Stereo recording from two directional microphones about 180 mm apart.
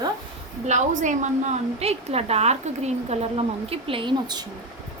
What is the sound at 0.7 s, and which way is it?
A woman's voice, 40° right (ahead or behind).